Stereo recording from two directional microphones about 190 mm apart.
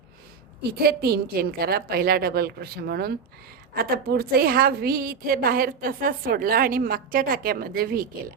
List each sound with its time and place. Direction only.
0.8 s a woman's voice: 55° right (ahead or behind)